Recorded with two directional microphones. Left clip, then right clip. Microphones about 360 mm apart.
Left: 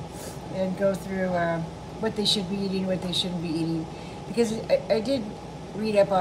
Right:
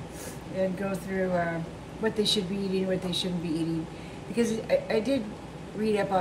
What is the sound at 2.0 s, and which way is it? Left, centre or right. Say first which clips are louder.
A woman's voice: left 1 dB; centre.